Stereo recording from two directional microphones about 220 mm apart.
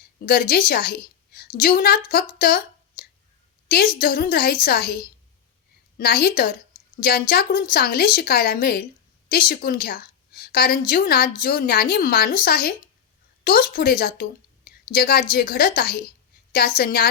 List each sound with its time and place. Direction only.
0.2 s a woman's voice: 45° left (ahead or behind)
0.7 s a sound: 45° left (ahead or behind)
1.5 s a woman's voice: 40° left (ahead or behind)
6.0 s a woman's voice: 45° left (ahead or behind)